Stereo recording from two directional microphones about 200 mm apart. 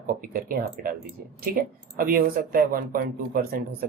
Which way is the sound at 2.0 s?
45° right (ahead or behind).